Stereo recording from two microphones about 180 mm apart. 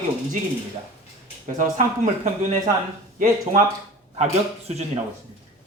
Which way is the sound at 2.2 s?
45° right (ahead or behind).